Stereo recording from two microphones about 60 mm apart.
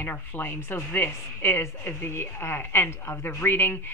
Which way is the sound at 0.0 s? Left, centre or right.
Left.